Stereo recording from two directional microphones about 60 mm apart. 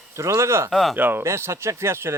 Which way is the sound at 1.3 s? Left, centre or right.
Right.